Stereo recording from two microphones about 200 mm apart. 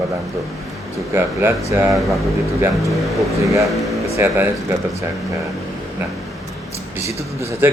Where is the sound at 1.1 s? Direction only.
10° right (ahead or behind).